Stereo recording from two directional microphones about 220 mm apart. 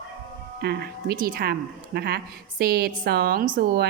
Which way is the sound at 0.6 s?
45° right (ahead or behind).